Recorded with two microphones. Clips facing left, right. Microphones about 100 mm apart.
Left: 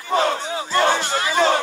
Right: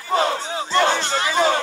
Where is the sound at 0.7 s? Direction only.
30° right (ahead or behind).